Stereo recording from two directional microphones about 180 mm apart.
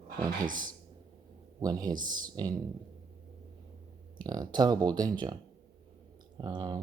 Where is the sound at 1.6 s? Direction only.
20° right (ahead or behind).